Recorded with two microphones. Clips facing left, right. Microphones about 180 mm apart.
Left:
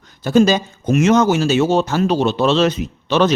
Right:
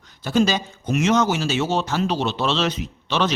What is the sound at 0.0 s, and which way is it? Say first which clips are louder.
Speech: left 6 dB; 50° left (ahead or behind).